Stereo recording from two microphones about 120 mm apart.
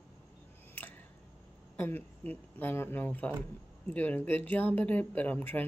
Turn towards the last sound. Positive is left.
turn(degrees=15)  # may be behind; listen again after turning